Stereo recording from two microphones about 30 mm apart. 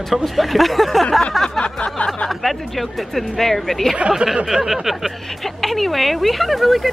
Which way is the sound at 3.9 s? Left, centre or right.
Right.